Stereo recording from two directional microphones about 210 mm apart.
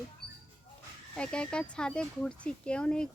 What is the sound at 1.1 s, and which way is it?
A woman's voice, 5° left (ahead or behind).